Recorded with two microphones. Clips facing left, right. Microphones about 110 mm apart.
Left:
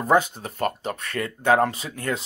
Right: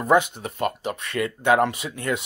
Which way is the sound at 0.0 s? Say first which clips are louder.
Right 1 dB; 35° left (ahead or behind).